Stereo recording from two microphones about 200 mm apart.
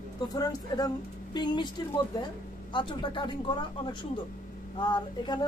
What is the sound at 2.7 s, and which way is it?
Speech, 25° left (ahead or behind).